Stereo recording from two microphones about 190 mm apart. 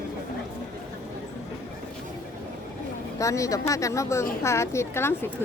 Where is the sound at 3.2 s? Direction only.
15° left (ahead or behind).